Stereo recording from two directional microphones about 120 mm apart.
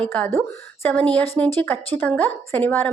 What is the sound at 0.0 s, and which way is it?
A woman's voice, 10° left (ahead or behind).